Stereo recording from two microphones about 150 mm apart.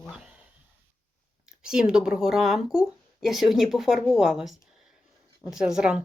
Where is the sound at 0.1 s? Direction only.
5° right (ahead or behind).